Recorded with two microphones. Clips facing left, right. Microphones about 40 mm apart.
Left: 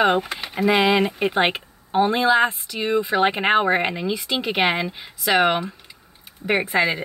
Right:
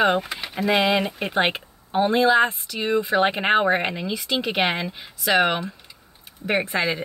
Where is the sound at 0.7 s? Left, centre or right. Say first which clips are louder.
Left 2 dB; centre.